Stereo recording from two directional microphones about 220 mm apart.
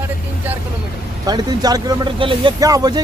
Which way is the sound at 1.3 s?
20° right (ahead or behind).